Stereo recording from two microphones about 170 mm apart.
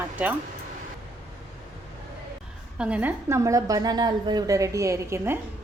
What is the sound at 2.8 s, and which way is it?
A woman's voice, 10° right (ahead or behind).